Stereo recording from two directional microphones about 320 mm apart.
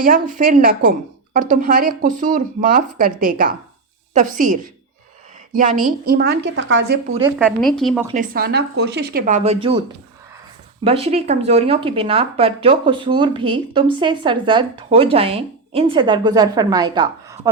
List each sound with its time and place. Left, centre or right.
0.0 s a woman's voice: right
7.1 s speech: centre
7.3 s a woman's voice: centre
8.0 s a woman's voice: right
10.8 s speech: centre